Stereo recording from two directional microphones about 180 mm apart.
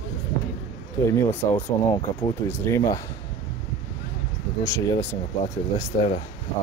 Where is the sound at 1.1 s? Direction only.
15° left (ahead or behind).